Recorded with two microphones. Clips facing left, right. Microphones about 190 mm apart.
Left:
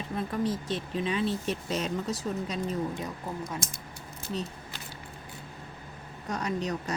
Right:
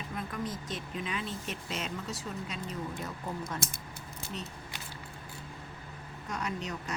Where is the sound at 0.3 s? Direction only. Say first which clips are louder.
Left 10 dB; 30° left (ahead or behind).